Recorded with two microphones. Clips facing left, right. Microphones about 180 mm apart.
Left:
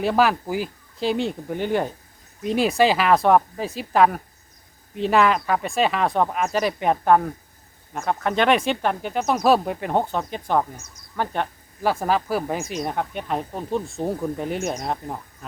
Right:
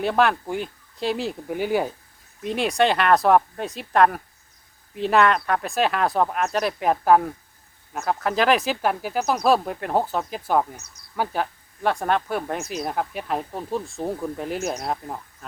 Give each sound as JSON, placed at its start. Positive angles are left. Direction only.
{"t": 0.0, "sound": "speech", "side_deg": 0}